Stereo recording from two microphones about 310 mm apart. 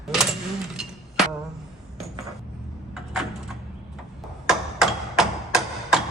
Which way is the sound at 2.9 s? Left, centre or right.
Centre.